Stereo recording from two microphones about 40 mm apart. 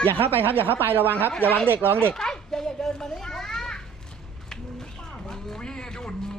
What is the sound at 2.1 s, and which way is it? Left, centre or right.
Children playing, centre.